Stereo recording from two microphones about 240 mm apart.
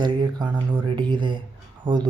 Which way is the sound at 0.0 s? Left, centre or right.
Centre.